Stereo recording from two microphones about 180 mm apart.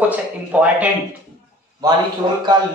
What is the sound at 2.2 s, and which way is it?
Speech, 25° right (ahead or behind).